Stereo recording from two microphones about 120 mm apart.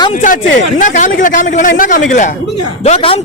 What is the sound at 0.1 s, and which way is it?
Speech, 80° left.